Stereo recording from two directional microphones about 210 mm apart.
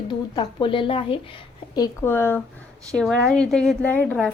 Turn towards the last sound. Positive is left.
turn(degrees=10)  # may be behind; listen again after turning